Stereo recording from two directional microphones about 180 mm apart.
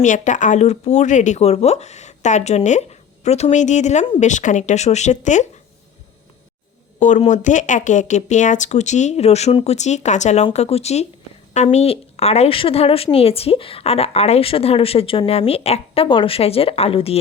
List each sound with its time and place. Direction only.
0.0 s a woman's voice: 45° left (ahead or behind)
7.0 s a woman's voice: 40° left (ahead or behind)